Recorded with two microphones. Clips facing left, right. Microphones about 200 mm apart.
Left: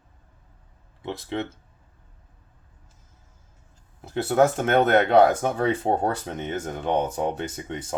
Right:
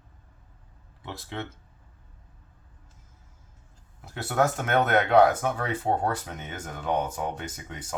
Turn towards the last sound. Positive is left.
turn(degrees=25)  # may be behind; listen again after turning